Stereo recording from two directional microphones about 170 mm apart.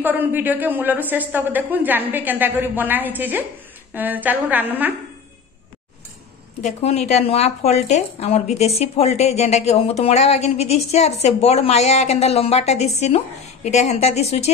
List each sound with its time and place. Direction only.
0.0 s a woman's voice: 10° right (ahead or behind)
6.6 s speech: 40° left (ahead or behind)